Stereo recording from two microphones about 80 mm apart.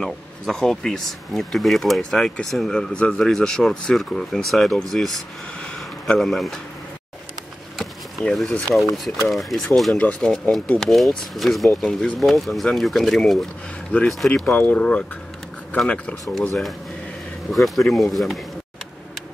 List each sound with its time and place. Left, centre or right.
0.0 s speech: centre
5.6 s a sound: centre
7.7 s a sound: centre
8.9 s speech: centre
9.9 s speech: centre
10.8 s speech: centre
14.4 s speech: left
17.5 s speech: centre